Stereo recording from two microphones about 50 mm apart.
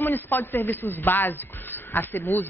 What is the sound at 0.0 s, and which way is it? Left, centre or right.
Speech, left.